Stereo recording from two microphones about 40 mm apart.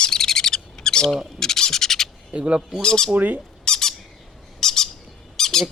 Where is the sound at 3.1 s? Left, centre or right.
Right.